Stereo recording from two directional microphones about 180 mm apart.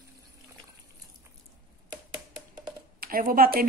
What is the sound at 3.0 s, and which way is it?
Speech, 55° right (ahead or behind).